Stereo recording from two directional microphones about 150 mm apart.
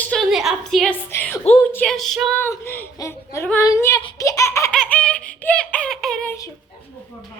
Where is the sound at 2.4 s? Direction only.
15° left (ahead or behind).